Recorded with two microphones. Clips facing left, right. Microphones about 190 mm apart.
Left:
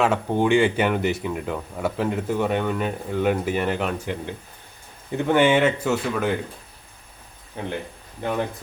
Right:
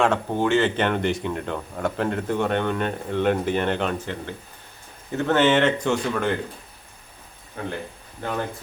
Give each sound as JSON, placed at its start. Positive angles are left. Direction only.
{"t": 0.0, "sound": "speech", "side_deg": 10}
{"t": 7.6, "sound": "speech", "side_deg": 20}